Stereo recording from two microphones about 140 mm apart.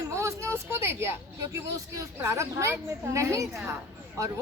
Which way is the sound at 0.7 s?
20° right (ahead or behind).